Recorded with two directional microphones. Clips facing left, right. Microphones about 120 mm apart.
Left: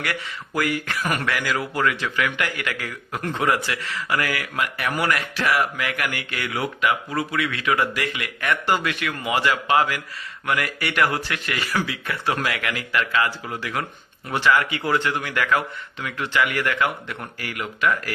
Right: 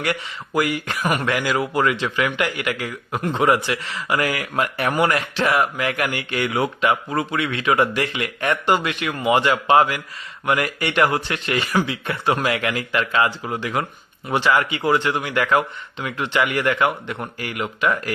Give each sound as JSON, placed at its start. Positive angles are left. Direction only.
{"t": 0.0, "sound": "speech", "side_deg": -20}
{"t": 4.2, "sound": "speech", "side_deg": -30}
{"t": 14.3, "sound": "speech", "side_deg": -20}